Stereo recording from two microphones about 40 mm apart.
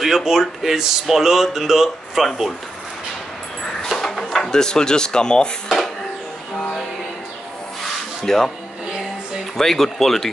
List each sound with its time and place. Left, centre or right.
0.0 s speech: centre
4.0 s a sound: centre
4.6 s speech: centre
7.8 s rub: centre
9.6 s speech: centre